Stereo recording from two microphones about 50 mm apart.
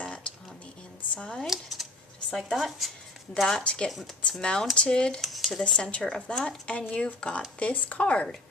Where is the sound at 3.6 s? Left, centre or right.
Left.